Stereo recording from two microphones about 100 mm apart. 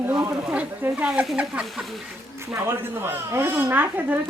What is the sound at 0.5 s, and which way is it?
Speech, 15° right (ahead or behind).